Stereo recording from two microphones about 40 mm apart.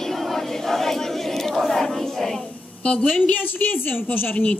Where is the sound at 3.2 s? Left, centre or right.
Left.